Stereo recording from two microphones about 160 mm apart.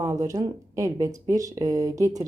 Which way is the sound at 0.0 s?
20° right (ahead or behind).